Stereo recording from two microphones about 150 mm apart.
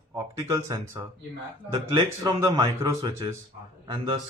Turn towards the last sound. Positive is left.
turn(degrees=-35)  # may be behind; listen again after turning